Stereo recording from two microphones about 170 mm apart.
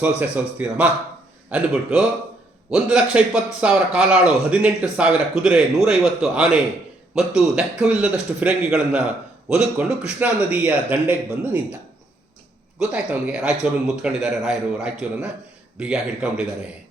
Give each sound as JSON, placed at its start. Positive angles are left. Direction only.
{"t": 0.2, "sound": "a man's voice", "side_deg": -10}
{"t": 12.8, "sound": "a man's voice", "side_deg": -5}